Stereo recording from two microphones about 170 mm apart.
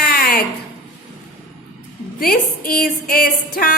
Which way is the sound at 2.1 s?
60° left (ahead or behind).